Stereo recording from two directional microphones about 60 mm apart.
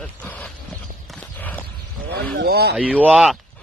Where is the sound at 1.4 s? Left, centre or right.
Left.